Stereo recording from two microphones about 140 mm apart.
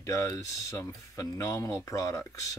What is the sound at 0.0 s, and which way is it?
Speech, 20° left (ahead or behind).